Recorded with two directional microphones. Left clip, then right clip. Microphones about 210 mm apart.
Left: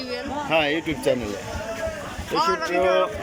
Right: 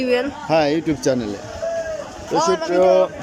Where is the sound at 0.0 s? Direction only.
55° right (ahead or behind).